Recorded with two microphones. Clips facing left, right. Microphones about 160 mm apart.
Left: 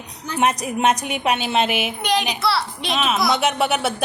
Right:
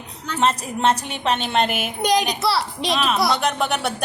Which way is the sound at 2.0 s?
40° right (ahead or behind).